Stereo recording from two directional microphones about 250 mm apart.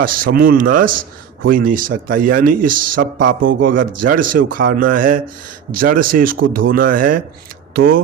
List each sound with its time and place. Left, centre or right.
0.0 s a man's voice: right